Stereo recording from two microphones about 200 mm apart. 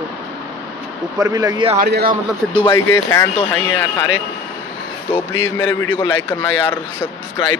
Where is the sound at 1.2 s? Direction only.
15° right (ahead or behind).